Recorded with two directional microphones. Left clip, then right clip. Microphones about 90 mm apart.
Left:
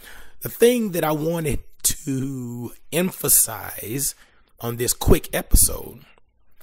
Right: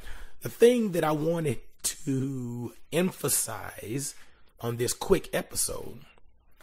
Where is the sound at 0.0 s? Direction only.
40° left (ahead or behind).